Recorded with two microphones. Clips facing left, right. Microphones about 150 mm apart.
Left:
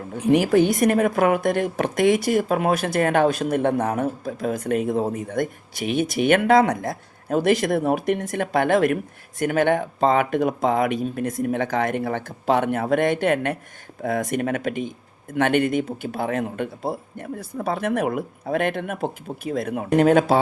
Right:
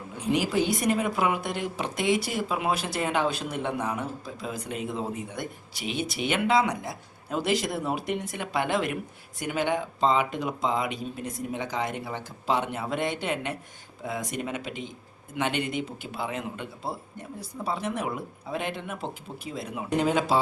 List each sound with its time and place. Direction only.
0.2 s a man's voice: 55° left (ahead or behind)